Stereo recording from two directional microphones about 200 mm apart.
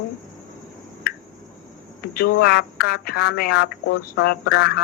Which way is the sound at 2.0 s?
50° left (ahead or behind).